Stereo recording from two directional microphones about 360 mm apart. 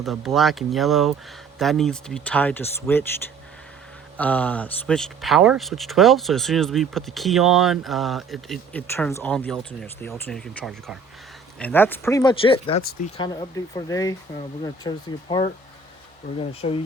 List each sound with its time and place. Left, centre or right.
0.0 s speech: centre
4.2 s speech: centre